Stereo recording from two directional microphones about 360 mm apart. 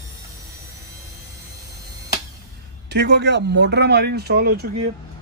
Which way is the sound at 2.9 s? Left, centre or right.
Right.